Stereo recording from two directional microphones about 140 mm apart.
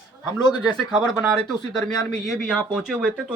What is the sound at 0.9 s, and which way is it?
Speech, centre (ahead or behind).